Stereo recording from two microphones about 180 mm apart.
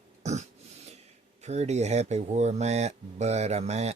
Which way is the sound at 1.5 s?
40° right (ahead or behind).